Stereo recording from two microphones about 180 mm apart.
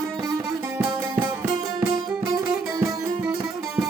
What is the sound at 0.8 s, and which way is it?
Music, 15° right (ahead or behind).